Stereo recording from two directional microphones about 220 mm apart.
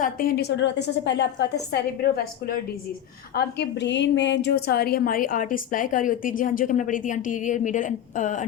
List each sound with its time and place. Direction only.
0.0 s a woman's voice: 40° left (ahead or behind)